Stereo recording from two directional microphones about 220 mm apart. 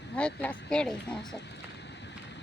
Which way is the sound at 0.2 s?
5° left (ahead or behind).